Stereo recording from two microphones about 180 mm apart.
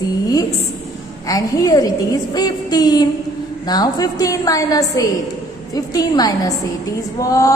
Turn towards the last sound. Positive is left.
turn(degrees=20)  # may be behind; listen again after turning